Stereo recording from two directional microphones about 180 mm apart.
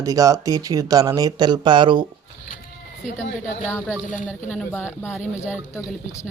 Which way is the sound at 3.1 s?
45° left (ahead or behind).